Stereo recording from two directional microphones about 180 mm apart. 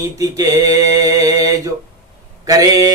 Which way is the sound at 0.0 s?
20° right (ahead or behind).